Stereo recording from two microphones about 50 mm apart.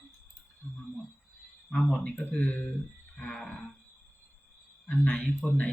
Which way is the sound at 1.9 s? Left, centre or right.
Centre.